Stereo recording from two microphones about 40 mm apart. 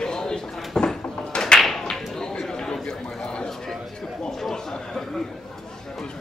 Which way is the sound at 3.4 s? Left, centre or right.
Centre.